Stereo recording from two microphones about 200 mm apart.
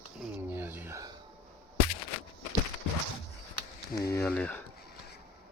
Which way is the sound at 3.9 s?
15° left (ahead or behind).